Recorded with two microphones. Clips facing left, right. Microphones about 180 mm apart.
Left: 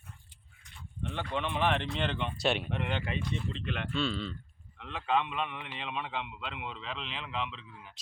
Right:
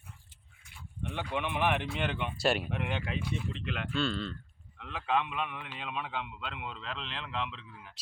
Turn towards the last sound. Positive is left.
turn(degrees=0)  # may be behind; listen again after turning